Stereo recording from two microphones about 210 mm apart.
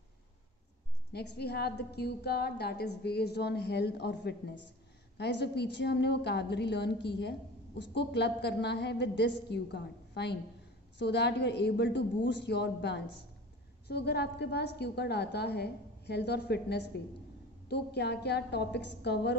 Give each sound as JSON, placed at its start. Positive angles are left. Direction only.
{"t": 1.3, "sound": "a woman's voice", "side_deg": 50}